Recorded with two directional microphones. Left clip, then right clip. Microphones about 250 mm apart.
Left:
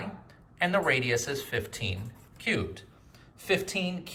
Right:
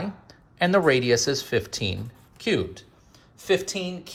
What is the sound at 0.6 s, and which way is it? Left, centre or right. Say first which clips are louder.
A woman's voice: right 6 dB; centre.